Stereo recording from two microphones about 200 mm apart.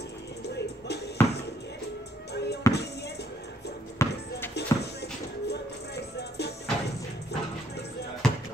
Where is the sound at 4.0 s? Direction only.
15° left (ahead or behind).